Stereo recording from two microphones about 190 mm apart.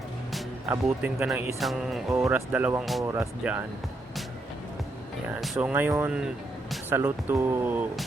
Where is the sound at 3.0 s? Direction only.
15° right (ahead or behind).